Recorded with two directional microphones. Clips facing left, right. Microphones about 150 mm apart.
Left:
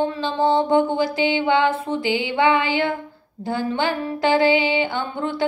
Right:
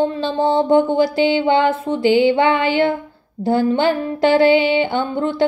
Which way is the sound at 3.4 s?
50° right (ahead or behind).